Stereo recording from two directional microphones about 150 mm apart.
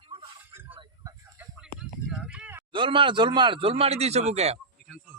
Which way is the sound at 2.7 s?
35° right (ahead or behind).